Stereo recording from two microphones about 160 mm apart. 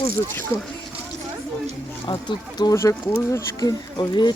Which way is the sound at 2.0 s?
25° left (ahead or behind).